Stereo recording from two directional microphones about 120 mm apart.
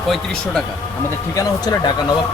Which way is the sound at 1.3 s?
30° left (ahead or behind).